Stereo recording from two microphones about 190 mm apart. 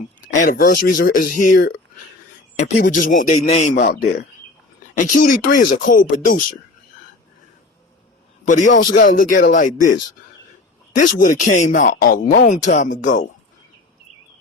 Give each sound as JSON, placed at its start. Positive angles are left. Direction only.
{"t": 0.3, "sound": "a man's voice", "side_deg": 45}
{"t": 4.9, "sound": "speech", "side_deg": 45}
{"t": 8.4, "sound": "speech", "side_deg": 40}
{"t": 10.9, "sound": "speech", "side_deg": 45}